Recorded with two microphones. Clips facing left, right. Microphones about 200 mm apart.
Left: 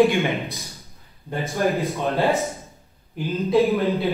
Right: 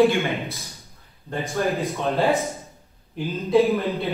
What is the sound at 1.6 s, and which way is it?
Speech, centre (ahead or behind).